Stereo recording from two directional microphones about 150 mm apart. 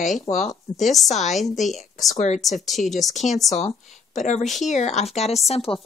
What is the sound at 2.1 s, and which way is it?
Speech, 50° left (ahead or behind).